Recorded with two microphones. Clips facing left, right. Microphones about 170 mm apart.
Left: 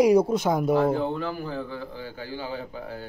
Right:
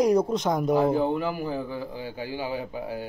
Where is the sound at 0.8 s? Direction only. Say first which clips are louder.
Right 1 dB; 15° right (ahead or behind).